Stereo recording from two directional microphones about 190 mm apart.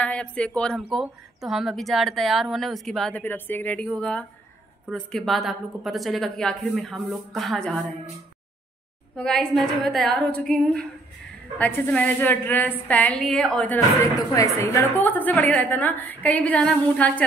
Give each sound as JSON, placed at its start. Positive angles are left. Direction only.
{"t": 0.0, "sound": "speech", "side_deg": 5}
{"t": 9.1, "sound": "a woman's voice", "side_deg": 5}
{"t": 13.9, "sound": "a woman's voice", "side_deg": 15}